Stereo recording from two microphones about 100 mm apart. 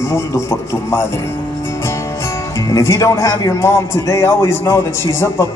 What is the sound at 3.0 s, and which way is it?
Speech, 35° left (ahead or behind).